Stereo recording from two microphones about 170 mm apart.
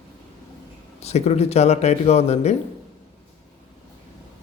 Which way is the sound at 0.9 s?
40° left (ahead or behind).